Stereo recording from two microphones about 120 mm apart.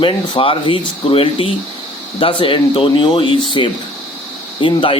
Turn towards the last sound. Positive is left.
turn(degrees=45)  # may be behind; listen again after turning